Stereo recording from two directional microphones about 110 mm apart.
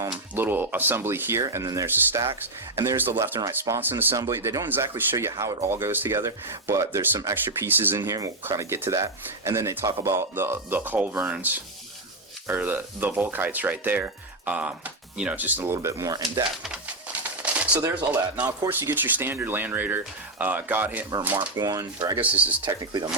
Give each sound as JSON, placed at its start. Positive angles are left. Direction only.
{"t": 0.3, "sound": "speech", "side_deg": -20}
{"t": 7.7, "sound": "speech", "side_deg": -20}
{"t": 8.0, "sound": "speech", "side_deg": -30}
{"t": 16.6, "sound": "bird", "side_deg": -10}
{"t": 18.7, "sound": "speech", "side_deg": -20}
{"t": 21.5, "sound": "speech", "side_deg": -35}
{"t": 22.1, "sound": "speech", "side_deg": -15}
{"t": 22.6, "sound": "speech", "side_deg": -45}